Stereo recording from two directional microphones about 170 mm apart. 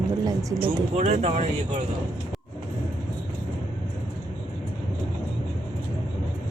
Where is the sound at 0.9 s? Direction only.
40° right (ahead or behind).